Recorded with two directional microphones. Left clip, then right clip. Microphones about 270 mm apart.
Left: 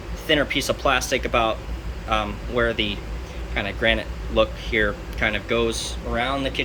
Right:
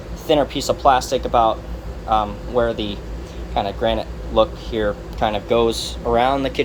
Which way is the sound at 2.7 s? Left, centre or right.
Centre.